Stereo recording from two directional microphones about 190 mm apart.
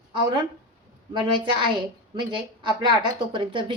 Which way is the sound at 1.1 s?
25° right (ahead or behind).